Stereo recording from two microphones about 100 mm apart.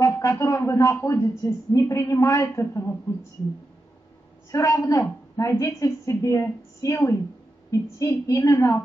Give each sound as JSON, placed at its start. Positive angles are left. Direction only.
{"t": 0.0, "sound": "a sound", "side_deg": 30}
{"t": 0.7, "sound": "a woman's voice", "side_deg": 30}
{"t": 4.5, "sound": "a woman's voice", "side_deg": 30}